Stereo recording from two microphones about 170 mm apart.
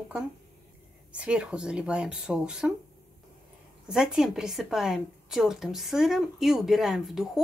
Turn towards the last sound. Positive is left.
turn(degrees=0)  # may be behind; listen again after turning